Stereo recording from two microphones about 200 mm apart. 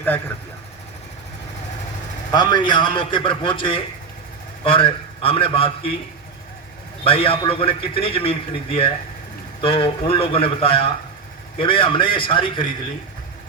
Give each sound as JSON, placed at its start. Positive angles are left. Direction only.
{"t": 2.3, "sound": "a man's voice", "side_deg": 20}
{"t": 7.0, "sound": "a man's voice", "side_deg": 25}